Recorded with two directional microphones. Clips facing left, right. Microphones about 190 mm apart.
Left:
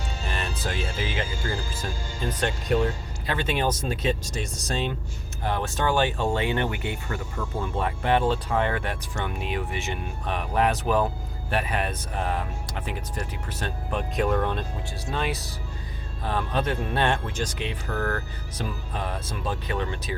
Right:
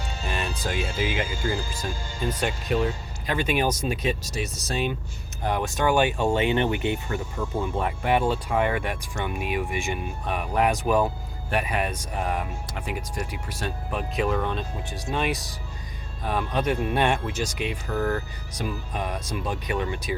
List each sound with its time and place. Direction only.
0.3 s speech: 15° right (ahead or behind)
2.4 s speech: 5° right (ahead or behind)
13.5 s speech: 10° right (ahead or behind)
14.8 s speech: 15° right (ahead or behind)